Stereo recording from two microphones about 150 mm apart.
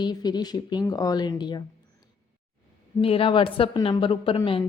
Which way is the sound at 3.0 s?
35° left (ahead or behind).